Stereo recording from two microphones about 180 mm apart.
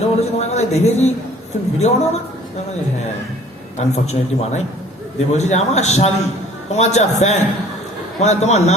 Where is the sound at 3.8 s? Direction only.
40° left (ahead or behind).